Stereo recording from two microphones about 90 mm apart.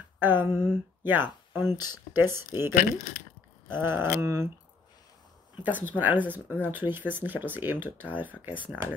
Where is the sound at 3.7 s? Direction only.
25° right (ahead or behind).